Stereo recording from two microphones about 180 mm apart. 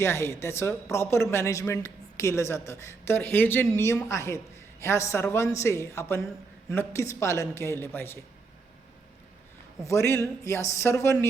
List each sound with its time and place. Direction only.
0.0 s a woman's voice: 15° left (ahead or behind)
9.8 s a woman's voice: 15° left (ahead or behind)